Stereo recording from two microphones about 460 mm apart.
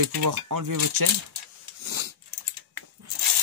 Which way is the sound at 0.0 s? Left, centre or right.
Right.